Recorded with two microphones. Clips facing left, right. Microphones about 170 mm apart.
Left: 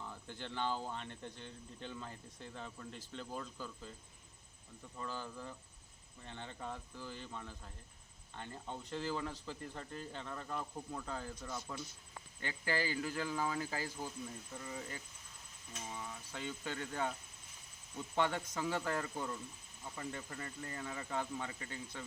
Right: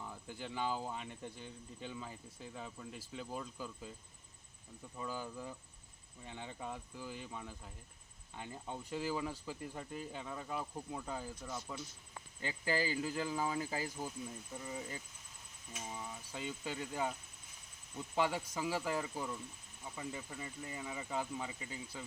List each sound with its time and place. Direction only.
0.0 s speech: 10° right (ahead or behind)
4.9 s speech: 10° right (ahead or behind)